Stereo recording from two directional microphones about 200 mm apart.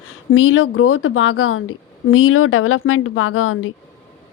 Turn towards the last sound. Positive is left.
turn(degrees=90)